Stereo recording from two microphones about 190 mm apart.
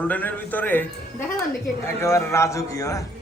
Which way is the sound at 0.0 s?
10° left (ahead or behind).